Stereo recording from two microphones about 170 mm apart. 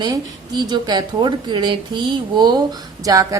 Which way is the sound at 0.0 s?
25° right (ahead or behind).